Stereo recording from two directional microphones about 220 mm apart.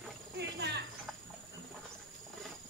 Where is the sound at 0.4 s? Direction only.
50° right (ahead or behind).